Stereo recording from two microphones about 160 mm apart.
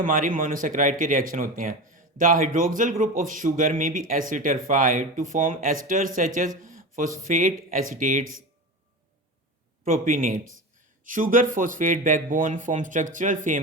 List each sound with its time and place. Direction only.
0.0 s a man's voice: 60° right (ahead or behind)
9.8 s a man's voice: 55° right (ahead or behind)